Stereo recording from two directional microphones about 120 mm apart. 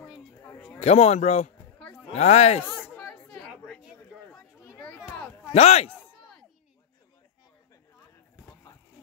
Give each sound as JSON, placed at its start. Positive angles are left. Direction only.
{"t": 0.7, "sound": "a man's voice", "side_deg": 60}
{"t": 3.0, "sound": "chatter", "side_deg": 10}
{"t": 5.5, "sound": "a man's voice", "side_deg": 60}
{"t": 5.9, "sound": "a sound", "side_deg": 5}